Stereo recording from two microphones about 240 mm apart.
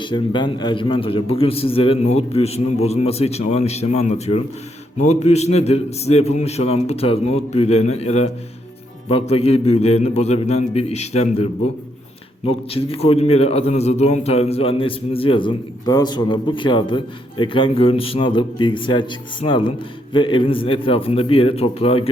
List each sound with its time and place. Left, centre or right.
0.0 s a man's voice: centre
12.5 s a man's voice: left